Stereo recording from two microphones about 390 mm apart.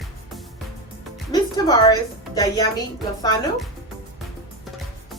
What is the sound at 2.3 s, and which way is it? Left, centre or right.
A child's voice, centre.